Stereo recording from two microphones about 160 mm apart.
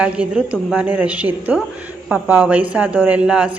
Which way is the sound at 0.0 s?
5° right (ahead or behind).